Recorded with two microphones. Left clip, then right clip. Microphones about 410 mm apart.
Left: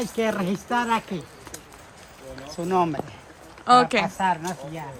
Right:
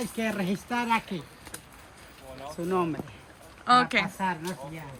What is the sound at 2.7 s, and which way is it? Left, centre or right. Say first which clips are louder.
Speech: left 6 dB; left.